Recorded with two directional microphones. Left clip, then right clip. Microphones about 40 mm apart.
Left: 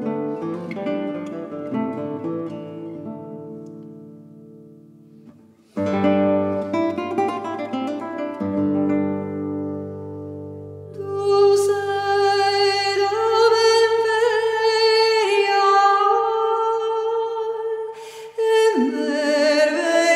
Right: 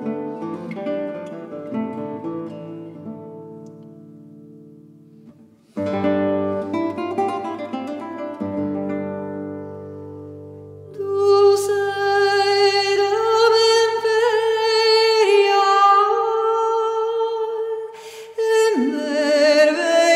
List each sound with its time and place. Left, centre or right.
0.0 s music: left
5.9 s music: left
6.7 s guitar: left
9.1 s music: centre
11.0 s music: right
14.1 s humming: right
14.5 s female singing: right
18.3 s music: right
18.7 s music: centre
18.9 s music: right